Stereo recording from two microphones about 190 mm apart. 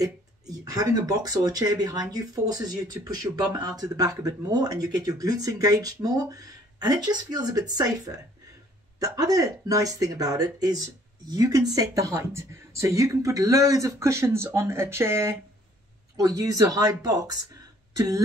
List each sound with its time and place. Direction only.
0.0 s speech: 20° right (ahead or behind)